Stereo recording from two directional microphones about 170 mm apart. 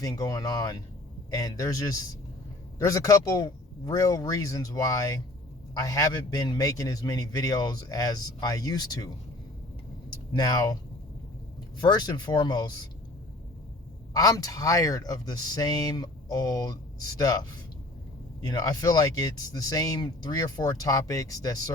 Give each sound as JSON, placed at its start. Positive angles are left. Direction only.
{"t": 0.0, "sound": "speech", "side_deg": 20}
{"t": 10.3, "sound": "speech", "side_deg": 20}
{"t": 11.8, "sound": "speech", "side_deg": 25}
{"t": 14.1, "sound": "speech", "side_deg": 20}